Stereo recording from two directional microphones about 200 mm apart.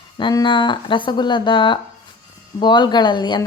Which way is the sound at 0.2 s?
25° left (ahead or behind).